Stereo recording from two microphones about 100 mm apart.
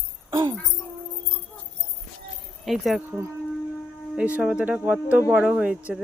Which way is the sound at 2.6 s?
Centre (ahead or behind).